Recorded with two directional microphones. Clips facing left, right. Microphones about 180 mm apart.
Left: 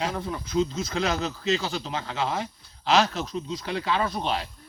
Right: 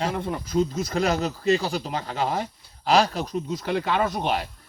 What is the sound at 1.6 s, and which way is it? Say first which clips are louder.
Speech: right 3 dB; 10° right (ahead or behind).